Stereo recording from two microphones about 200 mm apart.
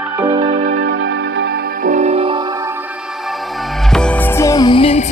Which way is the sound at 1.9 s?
30° right (ahead or behind).